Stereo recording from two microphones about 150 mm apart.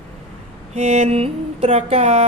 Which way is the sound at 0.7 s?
45° right (ahead or behind).